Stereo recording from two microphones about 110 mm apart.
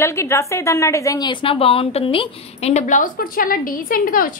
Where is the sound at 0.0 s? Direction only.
25° left (ahead or behind).